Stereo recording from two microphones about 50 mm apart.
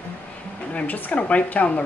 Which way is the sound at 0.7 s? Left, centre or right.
Left.